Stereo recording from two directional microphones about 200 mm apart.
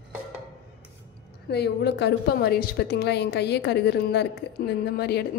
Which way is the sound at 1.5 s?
55° left (ahead or behind).